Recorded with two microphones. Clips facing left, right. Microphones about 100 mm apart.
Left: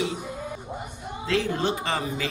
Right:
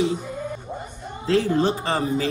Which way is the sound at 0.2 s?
10° left (ahead or behind).